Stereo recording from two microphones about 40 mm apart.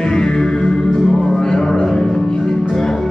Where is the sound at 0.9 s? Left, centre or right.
Centre.